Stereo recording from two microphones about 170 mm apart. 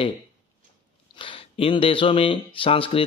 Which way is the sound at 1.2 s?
30° left (ahead or behind).